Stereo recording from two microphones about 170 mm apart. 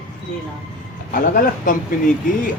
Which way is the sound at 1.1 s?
55° left (ahead or behind).